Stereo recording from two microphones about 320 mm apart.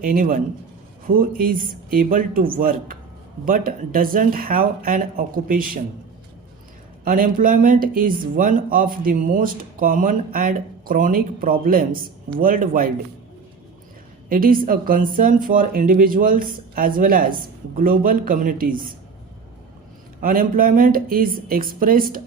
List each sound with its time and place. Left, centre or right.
0.0 s speech: right
7.0 s speech: right
14.3 s speech: right
20.2 s speech: right